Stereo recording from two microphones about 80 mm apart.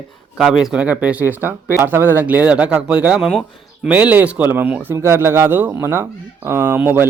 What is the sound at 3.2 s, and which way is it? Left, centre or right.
Speech, centre.